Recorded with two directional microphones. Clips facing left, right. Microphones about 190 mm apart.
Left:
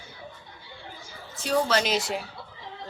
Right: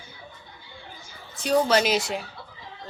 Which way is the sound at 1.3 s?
15° right (ahead or behind).